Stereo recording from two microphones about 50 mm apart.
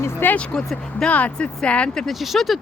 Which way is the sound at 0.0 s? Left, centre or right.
Left.